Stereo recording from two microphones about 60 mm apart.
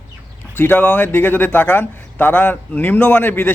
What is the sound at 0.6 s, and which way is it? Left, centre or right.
Speech, left.